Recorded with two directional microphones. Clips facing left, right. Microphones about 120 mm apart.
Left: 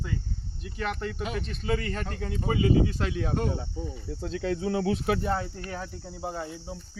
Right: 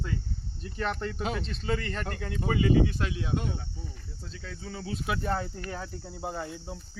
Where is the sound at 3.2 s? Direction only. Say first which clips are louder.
Left 6 dB; 50° left (ahead or behind).